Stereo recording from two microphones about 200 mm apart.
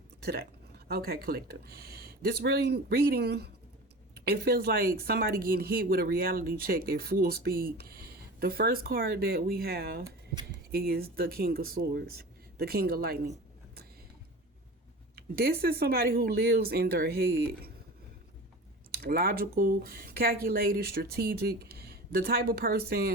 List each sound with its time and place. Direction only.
0.2 s speech: 55° right (ahead or behind)
15.1 s speech: 50° right (ahead or behind)
18.9 s speech: 50° right (ahead or behind)